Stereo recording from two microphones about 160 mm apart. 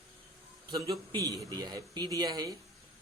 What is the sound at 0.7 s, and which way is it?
Speech, 25° right (ahead or behind).